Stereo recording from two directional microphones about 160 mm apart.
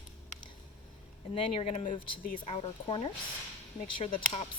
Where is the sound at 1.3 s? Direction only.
40° left (ahead or behind); by 2.4 s 55° left (ahead or behind).